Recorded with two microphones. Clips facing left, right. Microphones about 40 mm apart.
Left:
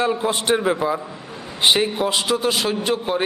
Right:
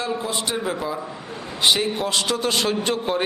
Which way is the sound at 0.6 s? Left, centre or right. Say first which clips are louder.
Left 5 dB; left.